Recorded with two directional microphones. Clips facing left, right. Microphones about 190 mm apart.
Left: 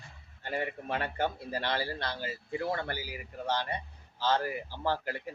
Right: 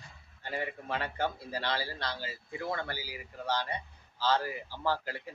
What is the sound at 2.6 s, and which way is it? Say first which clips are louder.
Speech: left 1 dB; 35° left (ahead or behind).